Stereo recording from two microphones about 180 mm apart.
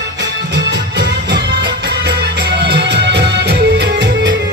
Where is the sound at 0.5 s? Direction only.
70° right (ahead or behind).